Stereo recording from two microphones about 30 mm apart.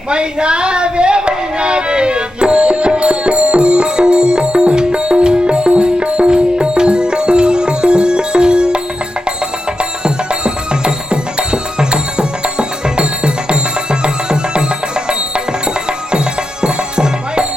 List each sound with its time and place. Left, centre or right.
0.1 s music: right
10.0 s music: right
16.6 s music: right